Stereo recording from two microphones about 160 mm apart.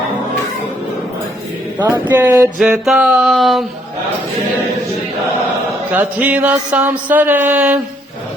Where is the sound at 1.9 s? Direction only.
10° right (ahead or behind).